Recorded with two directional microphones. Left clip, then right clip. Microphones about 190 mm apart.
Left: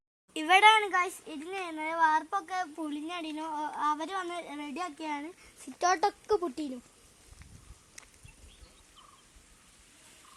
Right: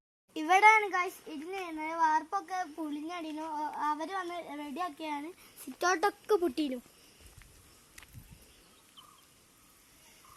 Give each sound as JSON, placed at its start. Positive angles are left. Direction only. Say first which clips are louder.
{"t": 0.3, "sound": "speech", "louder": "left 1 dB", "side_deg": 0}
{"t": 4.9, "sound": "speech", "louder": "left 1 dB", "side_deg": -45}
{"t": 5.8, "sound": "a child's voice", "louder": "left 2 dB", "side_deg": -60}